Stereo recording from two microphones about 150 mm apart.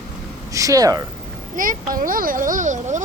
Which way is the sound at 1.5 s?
65° right (ahead or behind).